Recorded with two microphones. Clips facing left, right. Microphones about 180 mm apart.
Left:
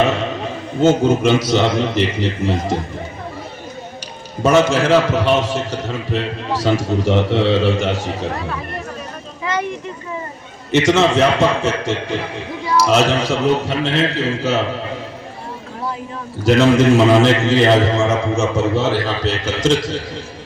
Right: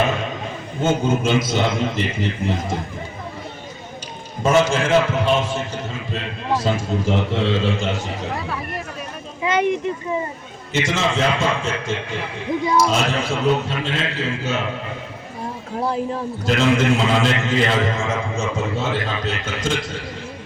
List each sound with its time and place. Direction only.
0.8 s a man's voice: 70° left (ahead or behind)
4.4 s a man's voice: 70° left (ahead or behind)
9.4 s a sound: 20° right (ahead or behind)
10.7 s a man's voice: 70° left (ahead or behind)
16.4 s a man's voice: 70° left (ahead or behind)